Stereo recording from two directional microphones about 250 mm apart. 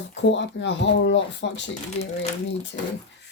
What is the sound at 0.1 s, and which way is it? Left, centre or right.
Speech, left.